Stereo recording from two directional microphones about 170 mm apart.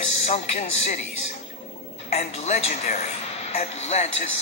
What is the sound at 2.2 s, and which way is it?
Speech, 40° left (ahead or behind).